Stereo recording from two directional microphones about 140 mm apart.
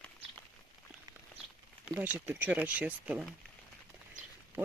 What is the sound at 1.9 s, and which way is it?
Speech, 15° right (ahead or behind).